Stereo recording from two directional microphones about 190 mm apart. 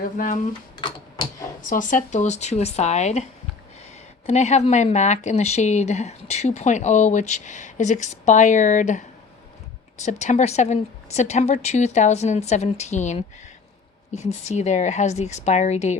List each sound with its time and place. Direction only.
0.2 s speech: 45° left (ahead or behind)
0.8 s a sound: 25° left (ahead or behind)
1.6 s speech: 45° left (ahead or behind)
4.3 s speech: 35° left (ahead or behind)